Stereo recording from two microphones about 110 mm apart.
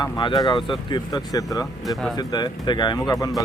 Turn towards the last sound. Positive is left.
turn(degrees=35)  # may be behind; listen again after turning